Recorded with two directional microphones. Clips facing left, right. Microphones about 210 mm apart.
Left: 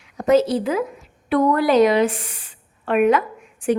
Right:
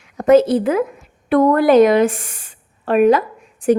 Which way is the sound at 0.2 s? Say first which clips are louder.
Right 5 dB; 55° right (ahead or behind).